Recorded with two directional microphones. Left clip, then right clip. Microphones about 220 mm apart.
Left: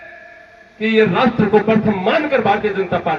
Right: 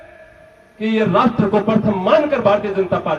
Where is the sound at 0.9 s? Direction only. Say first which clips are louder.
Left 1 dB; 55° right (ahead or behind).